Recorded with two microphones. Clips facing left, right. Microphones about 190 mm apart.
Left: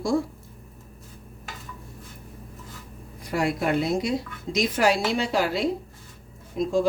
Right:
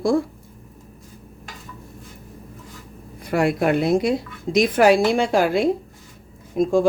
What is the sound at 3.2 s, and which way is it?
A woman's voice, 60° right (ahead or behind).